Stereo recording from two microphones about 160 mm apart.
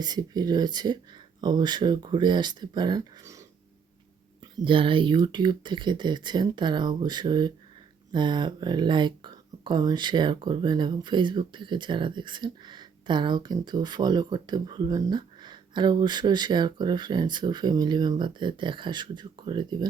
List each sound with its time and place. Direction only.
0.0 s speech: 25° right (ahead or behind)
4.5 s speech: 30° right (ahead or behind)